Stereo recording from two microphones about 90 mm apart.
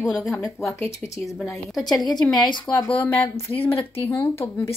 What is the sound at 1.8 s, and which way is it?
Speech, centre (ahead or behind).